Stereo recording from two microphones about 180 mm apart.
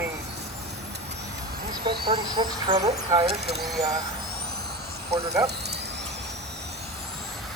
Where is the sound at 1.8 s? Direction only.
25° right (ahead or behind).